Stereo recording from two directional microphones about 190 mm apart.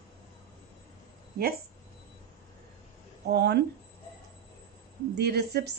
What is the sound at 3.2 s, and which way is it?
Speech, 60° right (ahead or behind).